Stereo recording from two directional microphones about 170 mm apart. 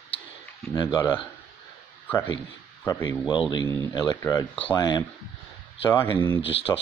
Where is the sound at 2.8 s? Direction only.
20° left (ahead or behind).